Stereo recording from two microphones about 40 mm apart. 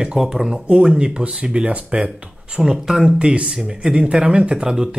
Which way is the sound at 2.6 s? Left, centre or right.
Centre.